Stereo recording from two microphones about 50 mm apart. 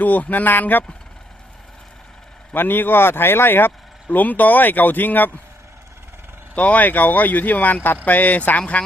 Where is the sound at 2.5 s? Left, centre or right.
Left.